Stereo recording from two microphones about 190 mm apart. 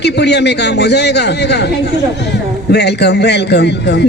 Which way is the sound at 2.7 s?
60° left (ahead or behind).